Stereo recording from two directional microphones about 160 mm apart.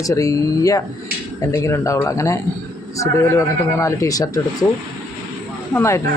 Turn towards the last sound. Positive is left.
turn(degrees=15)  # may be behind; listen again after turning